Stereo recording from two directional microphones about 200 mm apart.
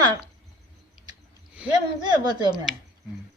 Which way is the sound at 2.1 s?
20° right (ahead or behind).